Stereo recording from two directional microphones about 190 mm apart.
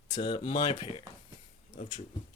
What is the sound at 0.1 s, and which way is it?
Speech, 25° left (ahead or behind).